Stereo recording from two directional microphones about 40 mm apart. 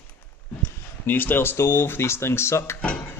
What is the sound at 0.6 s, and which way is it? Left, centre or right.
Speech, left.